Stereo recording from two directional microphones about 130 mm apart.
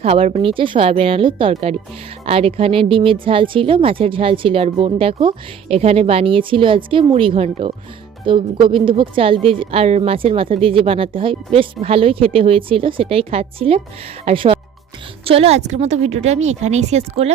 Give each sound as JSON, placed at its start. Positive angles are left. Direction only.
{"t": 0.0, "sound": "a woman's voice", "side_deg": -50}
{"t": 8.3, "sound": "a woman's voice", "side_deg": -40}